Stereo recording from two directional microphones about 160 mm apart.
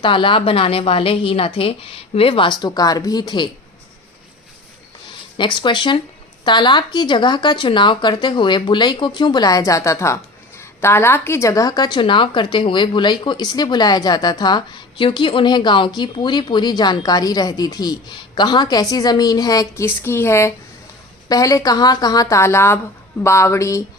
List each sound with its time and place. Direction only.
0.0 s a woman's voice: 30° left (ahead or behind)
5.4 s a woman's voice: 30° left (ahead or behind)